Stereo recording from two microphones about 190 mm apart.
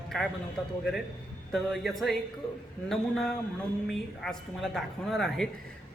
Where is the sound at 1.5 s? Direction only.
Centre (ahead or behind).